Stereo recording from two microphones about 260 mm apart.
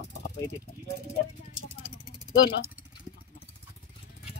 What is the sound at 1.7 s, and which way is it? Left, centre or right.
Vehicle, centre.